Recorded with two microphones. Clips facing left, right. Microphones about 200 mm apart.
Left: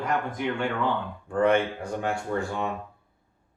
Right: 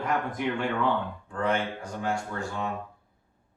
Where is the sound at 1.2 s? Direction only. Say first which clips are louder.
Left 7 dB; 60° left (ahead or behind).